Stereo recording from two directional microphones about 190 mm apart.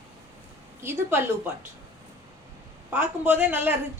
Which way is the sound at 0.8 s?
10° right (ahead or behind).